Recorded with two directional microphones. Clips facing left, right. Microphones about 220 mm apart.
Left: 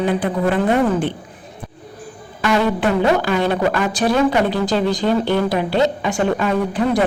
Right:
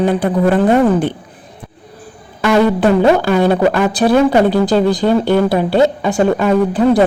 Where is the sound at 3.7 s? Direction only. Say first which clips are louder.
Right 6 dB; 35° right (ahead or behind).